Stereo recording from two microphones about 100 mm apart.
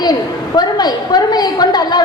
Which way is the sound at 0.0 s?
45° left (ahead or behind).